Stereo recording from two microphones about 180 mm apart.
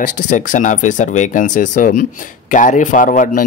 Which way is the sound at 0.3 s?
45° left (ahead or behind).